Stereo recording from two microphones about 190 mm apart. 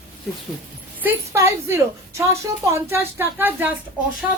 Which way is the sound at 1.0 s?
10° right (ahead or behind).